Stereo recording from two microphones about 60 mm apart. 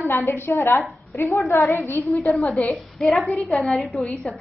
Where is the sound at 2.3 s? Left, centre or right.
Centre.